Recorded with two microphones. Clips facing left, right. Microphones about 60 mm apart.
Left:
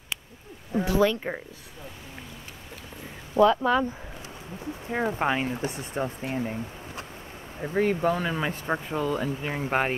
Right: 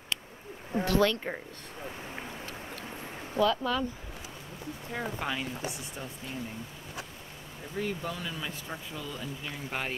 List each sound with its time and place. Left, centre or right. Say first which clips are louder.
0.7 s speech: left 3 dB; centre
3.3 s speech: left 7 dB; left
4.9 s speech: left 8 dB; left
7.6 s speech: left 11 dB; left